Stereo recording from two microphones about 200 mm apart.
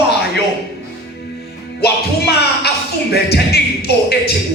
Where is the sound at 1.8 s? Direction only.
55° left (ahead or behind).